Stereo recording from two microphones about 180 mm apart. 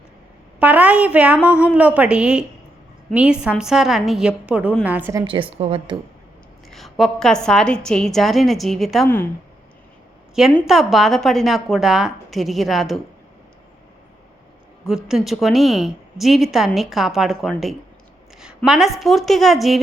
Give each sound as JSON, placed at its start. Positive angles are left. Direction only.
{"t": 0.6, "sound": "a woman's voice", "side_deg": -10}
{"t": 5.2, "sound": "a woman's voice", "side_deg": -30}
{"t": 6.7, "sound": "a woman's voice", "side_deg": 0}
{"t": 9.0, "sound": "speech", "side_deg": 10}
{"t": 10.5, "sound": "a woman's voice", "side_deg": 0}
{"t": 14.8, "sound": "a woman's voice", "side_deg": -5}